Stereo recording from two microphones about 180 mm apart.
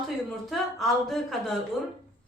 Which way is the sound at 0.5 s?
Centre (ahead or behind).